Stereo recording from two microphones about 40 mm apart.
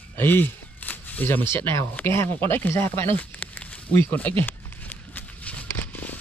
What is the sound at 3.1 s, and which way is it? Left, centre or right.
Speech, left.